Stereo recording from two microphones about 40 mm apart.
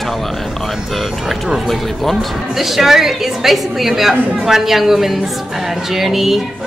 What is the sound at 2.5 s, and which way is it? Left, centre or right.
A woman's voice, centre.